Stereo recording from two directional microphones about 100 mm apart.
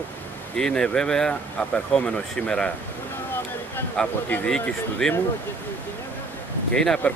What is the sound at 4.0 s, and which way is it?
Speech, 10° left (ahead or behind).